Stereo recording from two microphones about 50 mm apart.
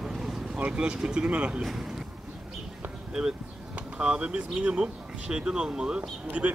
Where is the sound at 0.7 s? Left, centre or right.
Centre.